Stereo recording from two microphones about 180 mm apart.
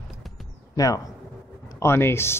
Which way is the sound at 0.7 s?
20° left (ahead or behind).